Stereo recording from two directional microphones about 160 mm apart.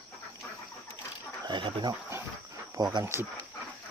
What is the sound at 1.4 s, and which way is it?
Speech, 30° right (ahead or behind).